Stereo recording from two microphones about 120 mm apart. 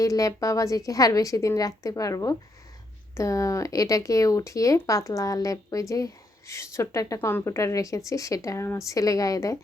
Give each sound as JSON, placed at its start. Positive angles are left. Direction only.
{"t": 0.0, "sound": "speech", "side_deg": 30}